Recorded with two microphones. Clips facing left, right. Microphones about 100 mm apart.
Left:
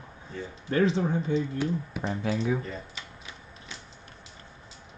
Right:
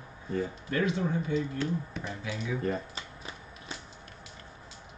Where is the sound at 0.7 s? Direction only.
30° left (ahead or behind).